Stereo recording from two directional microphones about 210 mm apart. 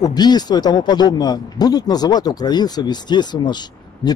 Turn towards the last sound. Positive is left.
turn(degrees=20)  # may be behind; listen again after turning